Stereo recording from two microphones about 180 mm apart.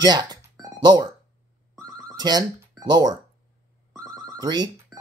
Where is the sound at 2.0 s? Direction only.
25° right (ahead or behind).